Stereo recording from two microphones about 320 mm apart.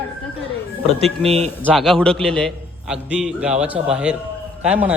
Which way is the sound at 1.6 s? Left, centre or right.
Centre.